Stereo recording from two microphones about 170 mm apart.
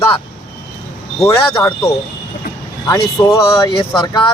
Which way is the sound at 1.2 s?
15° left (ahead or behind).